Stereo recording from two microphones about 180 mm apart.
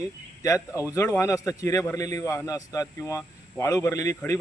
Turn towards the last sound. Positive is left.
turn(degrees=15)  # may be behind; listen again after turning